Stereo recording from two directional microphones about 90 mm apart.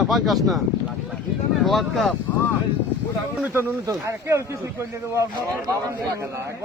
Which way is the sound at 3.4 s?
25° right (ahead or behind).